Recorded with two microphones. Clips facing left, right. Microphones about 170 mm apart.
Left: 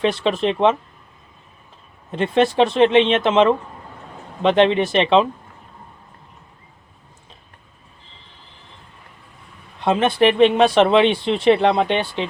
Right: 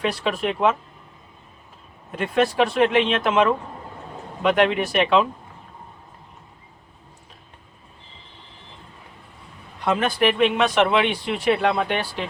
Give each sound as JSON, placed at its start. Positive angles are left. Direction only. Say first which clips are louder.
{"t": 0.0, "sound": "speech", "louder": "left 5 dB", "side_deg": 25}
{"t": 2.1, "sound": "speech", "louder": "left 4 dB", "side_deg": 25}
{"t": 9.8, "sound": "speech", "louder": "left 4 dB", "side_deg": 25}